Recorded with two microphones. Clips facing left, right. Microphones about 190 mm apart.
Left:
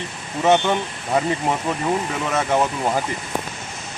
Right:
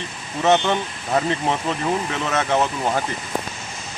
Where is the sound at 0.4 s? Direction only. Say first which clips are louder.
Left 1 dB; 15° left (ahead or behind).